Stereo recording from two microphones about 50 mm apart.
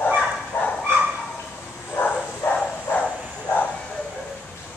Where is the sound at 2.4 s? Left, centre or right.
Left.